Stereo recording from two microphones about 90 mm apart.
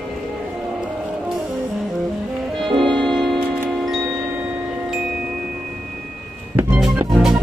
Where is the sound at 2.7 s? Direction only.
65° right (ahead or behind).